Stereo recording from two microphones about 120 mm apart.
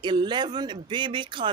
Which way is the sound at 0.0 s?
40° right (ahead or behind).